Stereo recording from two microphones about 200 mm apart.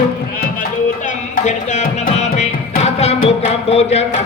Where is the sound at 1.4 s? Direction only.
35° left (ahead or behind).